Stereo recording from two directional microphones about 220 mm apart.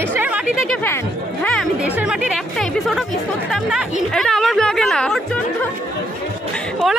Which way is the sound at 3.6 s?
Centre (ahead or behind).